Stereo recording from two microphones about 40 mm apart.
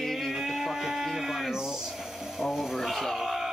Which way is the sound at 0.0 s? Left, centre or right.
Centre.